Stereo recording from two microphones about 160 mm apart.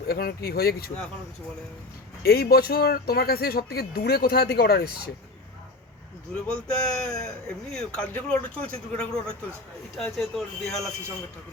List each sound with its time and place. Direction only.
0.1 s speech: 70° left (ahead or behind)
2.2 s speech: 70° left (ahead or behind)
6.3 s a man's voice: 5° left (ahead or behind)